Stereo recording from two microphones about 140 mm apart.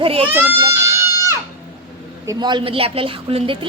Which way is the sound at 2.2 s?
30° right (ahead or behind).